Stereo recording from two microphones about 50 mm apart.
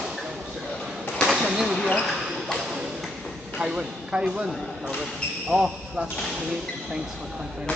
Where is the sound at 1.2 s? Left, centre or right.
Centre.